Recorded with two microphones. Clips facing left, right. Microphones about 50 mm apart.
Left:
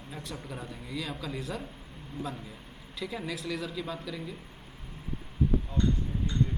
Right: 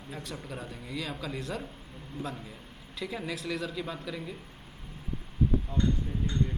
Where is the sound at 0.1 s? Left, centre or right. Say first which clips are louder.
Right 1 dB; centre.